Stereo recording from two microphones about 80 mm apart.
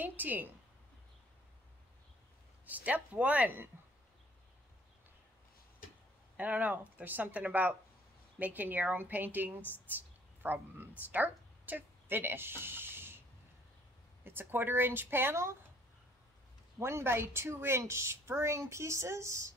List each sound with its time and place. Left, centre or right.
0.0 s speech: right
2.6 s speech: centre
6.3 s speech: centre
14.2 s speech: right
16.8 s a woman's voice: right